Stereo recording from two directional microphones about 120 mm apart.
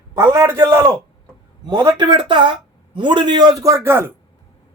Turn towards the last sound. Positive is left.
turn(degrees=-20)  # may be behind; listen again after turning